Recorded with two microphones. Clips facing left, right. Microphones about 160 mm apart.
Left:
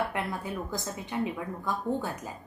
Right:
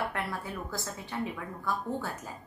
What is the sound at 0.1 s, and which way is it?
A woman's voice, 20° left (ahead or behind).